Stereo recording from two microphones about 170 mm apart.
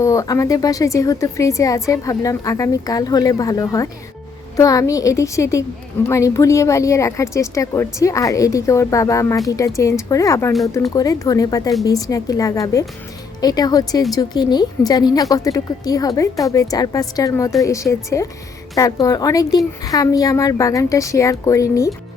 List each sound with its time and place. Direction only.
0.0 s a woman's voice: 20° left (ahead or behind)